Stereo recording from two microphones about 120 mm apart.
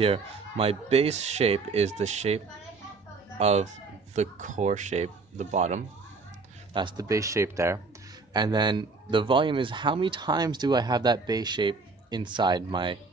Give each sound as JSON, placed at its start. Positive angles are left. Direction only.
{"t": 0.0, "sound": "speech", "side_deg": -50}
{"t": 4.1, "sound": "speech", "side_deg": -80}
{"t": 6.7, "sound": "speech", "side_deg": -40}
{"t": 7.1, "sound": "speech", "side_deg": -25}
{"t": 8.3, "sound": "a man's voice", "side_deg": -35}